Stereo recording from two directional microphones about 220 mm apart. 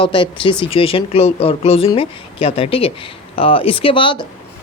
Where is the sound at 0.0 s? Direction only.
20° left (ahead or behind).